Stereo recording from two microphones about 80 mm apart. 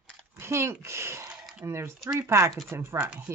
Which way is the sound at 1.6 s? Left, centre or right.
Right.